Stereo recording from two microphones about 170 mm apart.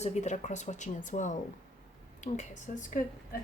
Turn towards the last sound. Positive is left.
turn(degrees=50)  # may be behind; listen again after turning